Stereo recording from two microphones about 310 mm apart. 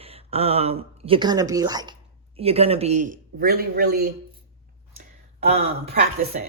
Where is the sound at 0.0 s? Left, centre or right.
Centre.